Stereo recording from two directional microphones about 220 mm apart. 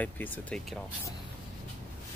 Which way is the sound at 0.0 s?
5° left (ahead or behind).